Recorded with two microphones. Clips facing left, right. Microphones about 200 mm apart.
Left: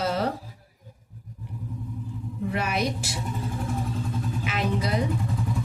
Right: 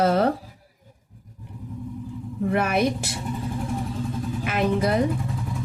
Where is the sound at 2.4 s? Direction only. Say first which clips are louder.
Right 5 dB; 55° right (ahead or behind).